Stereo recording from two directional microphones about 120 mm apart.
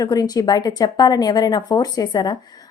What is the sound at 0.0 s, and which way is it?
Speech, 30° left (ahead or behind).